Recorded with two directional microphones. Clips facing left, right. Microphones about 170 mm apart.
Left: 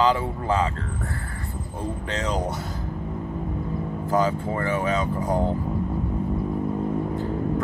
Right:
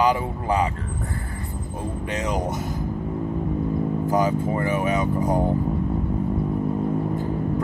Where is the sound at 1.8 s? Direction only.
15° right (ahead or behind).